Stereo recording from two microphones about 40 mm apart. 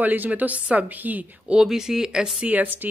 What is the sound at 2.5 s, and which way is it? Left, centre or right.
Speech, right.